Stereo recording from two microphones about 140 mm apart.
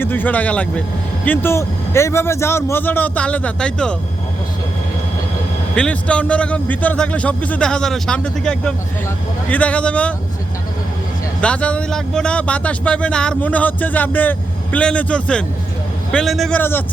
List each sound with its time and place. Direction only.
0.0 s speech: 15° left (ahead or behind)
5.7 s speech: 5° left (ahead or behind)
11.3 s a man's voice: 10° left (ahead or behind)
16.6 s speech: 15° left (ahead or behind)